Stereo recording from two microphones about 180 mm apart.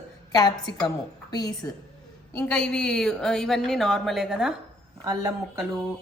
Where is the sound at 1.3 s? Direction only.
20° left (ahead or behind).